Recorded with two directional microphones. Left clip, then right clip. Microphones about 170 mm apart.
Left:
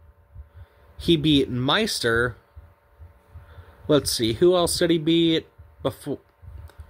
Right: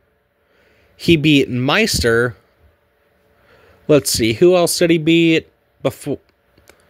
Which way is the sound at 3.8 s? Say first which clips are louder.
Right 7 dB; 40° right (ahead or behind).